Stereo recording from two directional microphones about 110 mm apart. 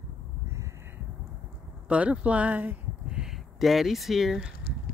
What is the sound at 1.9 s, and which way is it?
Speech, 10° right (ahead or behind).